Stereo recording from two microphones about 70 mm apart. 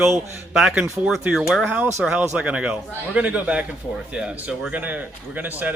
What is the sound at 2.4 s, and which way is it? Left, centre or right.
A man's voice, centre.